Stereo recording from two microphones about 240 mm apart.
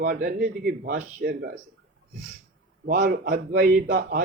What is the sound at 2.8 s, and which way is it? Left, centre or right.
Speech, right.